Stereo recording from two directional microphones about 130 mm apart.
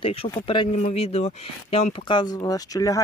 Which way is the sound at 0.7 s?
60° left (ahead or behind).